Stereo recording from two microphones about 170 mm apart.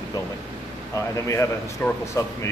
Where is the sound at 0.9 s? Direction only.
20° left (ahead or behind).